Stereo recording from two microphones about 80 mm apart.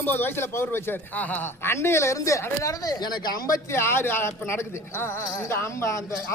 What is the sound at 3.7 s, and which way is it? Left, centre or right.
A man's voice, left.